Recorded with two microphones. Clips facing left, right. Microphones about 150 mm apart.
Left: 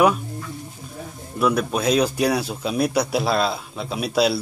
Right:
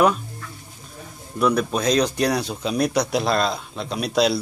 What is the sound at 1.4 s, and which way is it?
Speech, 5° left (ahead or behind).